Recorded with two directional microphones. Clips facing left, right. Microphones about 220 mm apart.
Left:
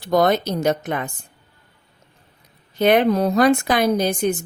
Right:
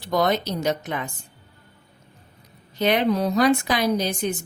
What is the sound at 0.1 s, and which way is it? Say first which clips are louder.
A woman's voice: left 4 dB; 50° left (ahead or behind).